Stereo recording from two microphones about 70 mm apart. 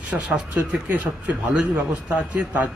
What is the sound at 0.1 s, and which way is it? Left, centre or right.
A man's voice, centre.